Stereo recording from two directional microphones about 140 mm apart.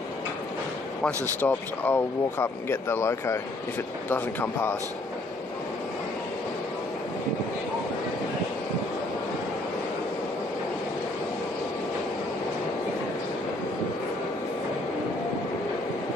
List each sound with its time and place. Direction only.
1.4 s speech: 15° left (ahead or behind)